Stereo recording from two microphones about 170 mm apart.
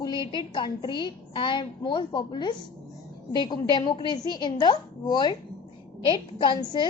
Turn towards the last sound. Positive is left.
turn(degrees=25)  # may be behind; listen again after turning